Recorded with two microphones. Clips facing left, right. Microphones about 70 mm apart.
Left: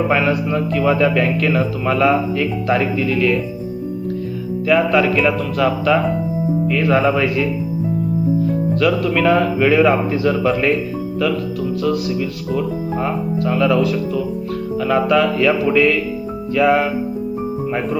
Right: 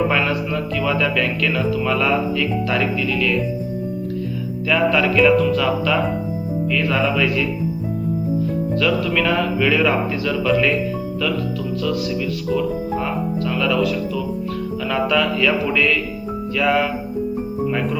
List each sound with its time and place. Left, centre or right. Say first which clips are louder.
0.1 s mantra: left 3 dB; centre
0.7 s music: left 5 dB; left
4.7 s mantra: left 3 dB; centre
6.7 s music: left 4 dB; left
8.8 s music: left 3 dB; centre
12.5 s music: right 1 dB; left
14.8 s mantra: left 4 dB; centre
16.6 s music: left 4 dB; left